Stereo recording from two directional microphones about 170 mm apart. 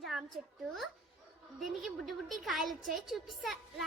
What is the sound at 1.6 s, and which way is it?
A woman's voice, centre (ahead or behind).